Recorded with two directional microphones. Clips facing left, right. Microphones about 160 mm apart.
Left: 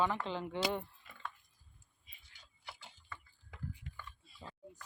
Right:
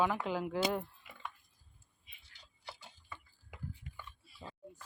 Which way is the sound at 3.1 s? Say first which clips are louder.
Right 1 dB; 15° right (ahead or behind).